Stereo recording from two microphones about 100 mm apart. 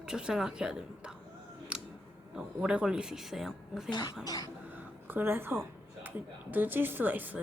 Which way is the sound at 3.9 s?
45° left (ahead or behind).